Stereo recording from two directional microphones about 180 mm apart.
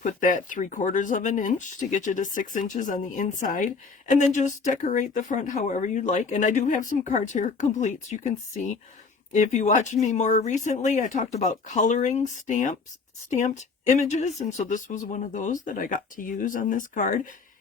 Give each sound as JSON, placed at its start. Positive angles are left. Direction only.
{"t": 0.0, "sound": "speech", "side_deg": 45}